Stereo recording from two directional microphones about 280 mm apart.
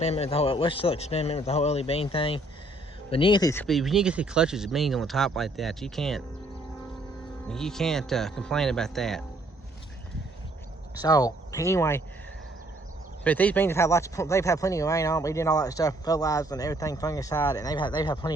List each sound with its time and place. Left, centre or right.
0.0 s a man's voice: left; by 6.2 s centre
7.4 s speech: centre
11.0 s speech: centre
13.2 s speech: centre